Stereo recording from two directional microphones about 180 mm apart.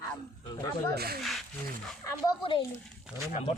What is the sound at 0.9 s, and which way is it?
Speech, 60° right (ahead or behind).